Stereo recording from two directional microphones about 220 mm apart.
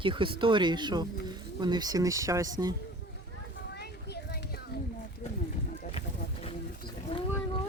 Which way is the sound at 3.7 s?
45° left (ahead or behind).